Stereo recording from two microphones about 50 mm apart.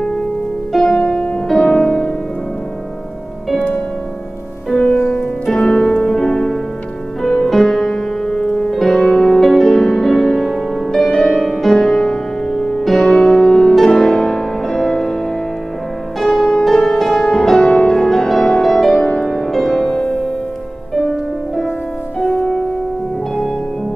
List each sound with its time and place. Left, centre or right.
0.0 s music: centre
0.9 s music: left
1.5 s music: centre
5.5 s music: centre
16.2 s music: centre
22.2 s music: left